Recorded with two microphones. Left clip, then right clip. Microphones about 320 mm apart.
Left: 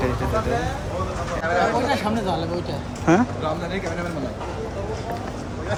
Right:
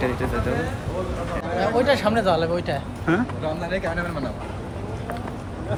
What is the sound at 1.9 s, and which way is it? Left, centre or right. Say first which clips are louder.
Speech: right 4 dB; centre.